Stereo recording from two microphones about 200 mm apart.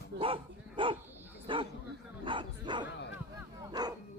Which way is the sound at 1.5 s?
25° right (ahead or behind).